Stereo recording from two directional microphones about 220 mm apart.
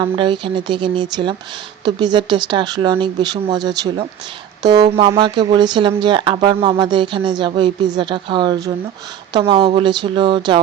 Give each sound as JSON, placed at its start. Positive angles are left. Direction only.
{"t": 0.0, "sound": "speech", "side_deg": -20}